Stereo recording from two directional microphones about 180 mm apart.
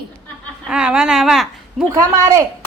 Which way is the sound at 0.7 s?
5° right (ahead or behind).